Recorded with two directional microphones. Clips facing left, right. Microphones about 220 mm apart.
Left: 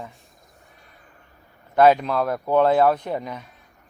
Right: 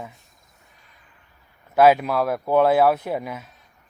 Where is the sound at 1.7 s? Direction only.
5° right (ahead or behind).